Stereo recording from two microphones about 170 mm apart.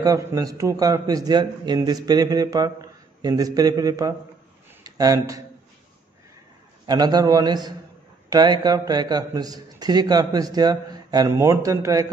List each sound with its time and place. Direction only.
0.0 s a man's voice: 20° right (ahead or behind)
6.9 s a man's voice: 25° right (ahead or behind)